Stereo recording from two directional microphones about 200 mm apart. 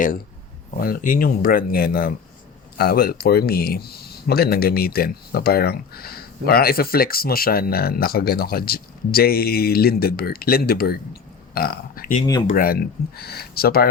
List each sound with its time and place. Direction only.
0.8 s speech: 45° left (ahead or behind)